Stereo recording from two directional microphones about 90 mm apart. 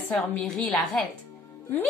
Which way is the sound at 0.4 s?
5° left (ahead or behind).